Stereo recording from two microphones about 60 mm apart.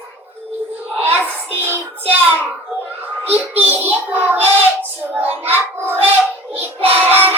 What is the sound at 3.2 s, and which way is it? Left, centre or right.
Child singing, right.